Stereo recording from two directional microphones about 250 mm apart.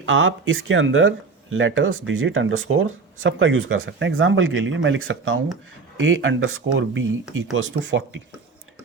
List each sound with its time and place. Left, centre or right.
0.0 s speech: right